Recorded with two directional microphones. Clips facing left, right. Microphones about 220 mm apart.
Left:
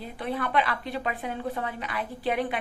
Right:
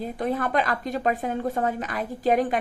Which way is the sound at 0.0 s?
45° right (ahead or behind).